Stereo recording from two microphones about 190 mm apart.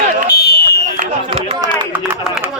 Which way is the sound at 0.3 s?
55° left (ahead or behind).